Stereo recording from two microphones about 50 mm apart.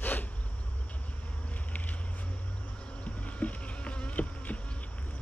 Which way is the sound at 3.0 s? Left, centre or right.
Left.